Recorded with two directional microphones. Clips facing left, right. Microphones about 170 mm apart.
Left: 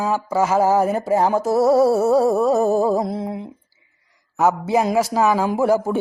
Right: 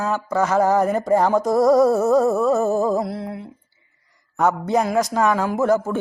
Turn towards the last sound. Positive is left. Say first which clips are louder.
# left 1 dB
turn(degrees=10)  # may be behind; listen again after turning